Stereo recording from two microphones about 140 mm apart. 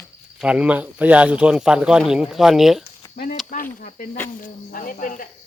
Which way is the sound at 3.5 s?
75° left (ahead or behind).